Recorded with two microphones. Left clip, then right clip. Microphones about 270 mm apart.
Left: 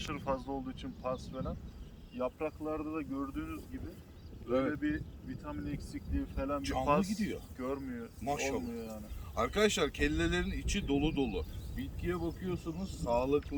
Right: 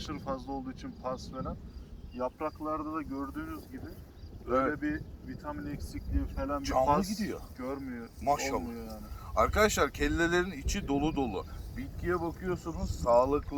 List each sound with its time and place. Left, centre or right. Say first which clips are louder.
0.1 s speech: even; centre
4.8 s speech: right 1 dB; centre
8.2 s speech: right 5 dB; centre
8.7 s speech: even; centre
9.3 s speech: right 4 dB; centre